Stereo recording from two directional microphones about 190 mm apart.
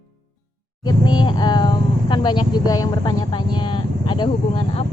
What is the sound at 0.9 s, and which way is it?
Vehicle, 25° left (ahead or behind).